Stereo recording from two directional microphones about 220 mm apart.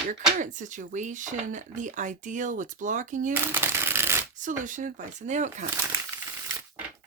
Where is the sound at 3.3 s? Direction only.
10° right (ahead or behind).